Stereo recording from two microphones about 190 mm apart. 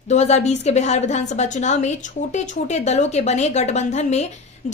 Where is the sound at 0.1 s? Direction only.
35° left (ahead or behind).